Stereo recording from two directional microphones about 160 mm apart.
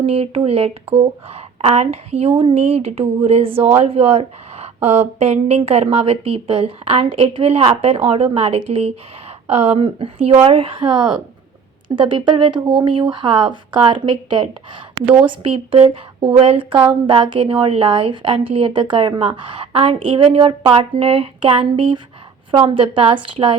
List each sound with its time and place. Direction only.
0.0 s a woman's voice: 35° right (ahead or behind)